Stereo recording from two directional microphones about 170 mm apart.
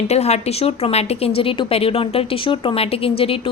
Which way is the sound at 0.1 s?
40° left (ahead or behind).